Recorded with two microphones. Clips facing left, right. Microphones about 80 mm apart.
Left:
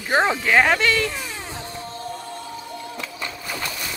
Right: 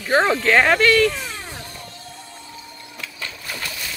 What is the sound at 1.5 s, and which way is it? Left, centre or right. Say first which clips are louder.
Music: left 4 dB; left.